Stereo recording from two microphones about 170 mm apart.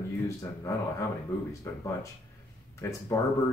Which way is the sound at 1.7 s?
15° left (ahead or behind).